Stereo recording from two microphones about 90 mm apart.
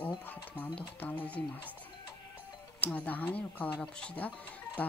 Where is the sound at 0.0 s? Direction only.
15° left (ahead or behind).